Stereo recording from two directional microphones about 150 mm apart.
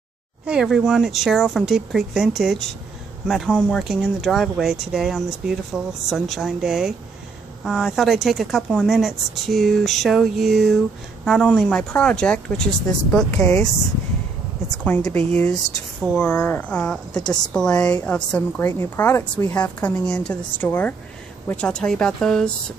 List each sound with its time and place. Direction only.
0.5 s speech: 5° right (ahead or behind)
13.3 s a woman's voice: 20° left (ahead or behind)
14.9 s speech: 20° left (ahead or behind)
15.1 s a woman's voice: 10° left (ahead or behind)